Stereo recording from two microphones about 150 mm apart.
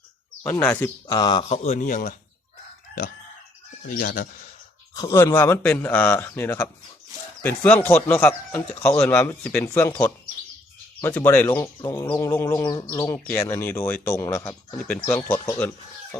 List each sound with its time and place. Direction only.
0.4 s a man's voice: 15° left (ahead or behind)
1.1 s speech: 30° left (ahead or behind)
1.5 s speech: 50° left (ahead or behind)
3.8 s speech: 85° left
4.9 s a man's voice: 20° left (ahead or behind)
11.0 s a man's voice: 15° left (ahead or behind)
12.1 s bird: 20° left (ahead or behind)
13.2 s a man's voice: 15° left (ahead or behind)